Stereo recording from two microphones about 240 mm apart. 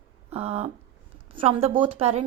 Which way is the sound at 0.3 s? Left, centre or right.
Right.